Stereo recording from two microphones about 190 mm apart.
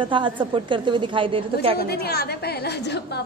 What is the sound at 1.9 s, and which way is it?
A woman's voice, 55° left (ahead or behind).